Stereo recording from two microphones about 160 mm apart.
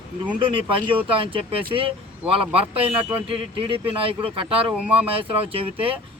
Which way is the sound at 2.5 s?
35° right (ahead or behind).